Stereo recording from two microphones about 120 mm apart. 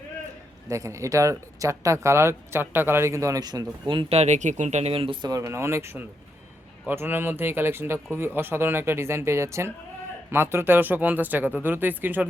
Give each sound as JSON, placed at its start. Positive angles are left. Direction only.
{"t": 0.7, "sound": "speech", "side_deg": -25}
{"t": 4.1, "sound": "speech", "side_deg": -70}
{"t": 5.3, "sound": "speech", "side_deg": -20}